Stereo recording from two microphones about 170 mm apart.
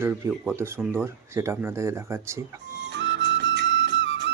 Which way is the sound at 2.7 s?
90° right.